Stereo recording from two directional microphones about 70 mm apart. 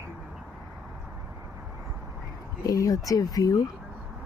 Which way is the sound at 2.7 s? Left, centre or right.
Left.